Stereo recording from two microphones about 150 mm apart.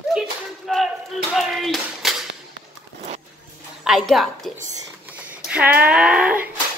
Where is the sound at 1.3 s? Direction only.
Centre (ahead or behind).